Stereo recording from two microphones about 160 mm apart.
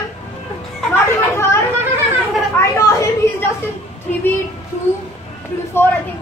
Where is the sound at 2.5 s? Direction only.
15° left (ahead or behind).